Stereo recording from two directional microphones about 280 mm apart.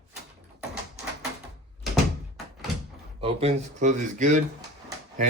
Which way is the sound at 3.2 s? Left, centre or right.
Right.